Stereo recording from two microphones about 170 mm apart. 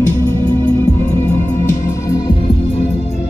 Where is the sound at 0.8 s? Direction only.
10° left (ahead or behind).